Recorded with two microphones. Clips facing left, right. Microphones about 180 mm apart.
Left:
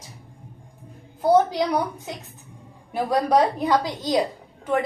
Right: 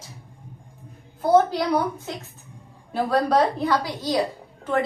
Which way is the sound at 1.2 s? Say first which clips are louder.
Even; 15° left (ahead or behind).